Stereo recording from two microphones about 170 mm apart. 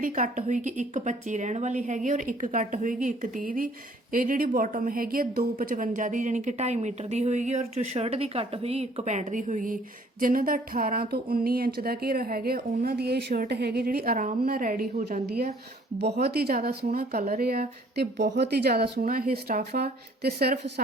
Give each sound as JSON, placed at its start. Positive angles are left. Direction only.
{"t": 0.0, "sound": "a woman's voice", "side_deg": -50}